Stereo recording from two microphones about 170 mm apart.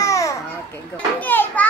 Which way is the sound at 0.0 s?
20° left (ahead or behind).